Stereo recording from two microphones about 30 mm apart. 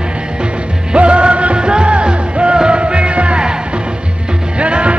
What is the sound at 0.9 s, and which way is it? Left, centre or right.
Music, right.